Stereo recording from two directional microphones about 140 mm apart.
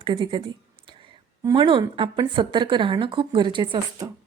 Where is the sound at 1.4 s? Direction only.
35° right (ahead or behind).